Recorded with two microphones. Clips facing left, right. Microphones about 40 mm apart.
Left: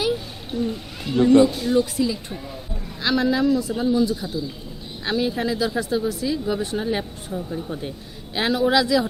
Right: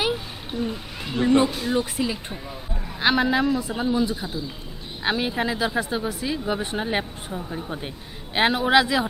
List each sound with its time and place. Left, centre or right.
0.5 s a sound: centre
1.1 s speech: centre
1.8 s speech: right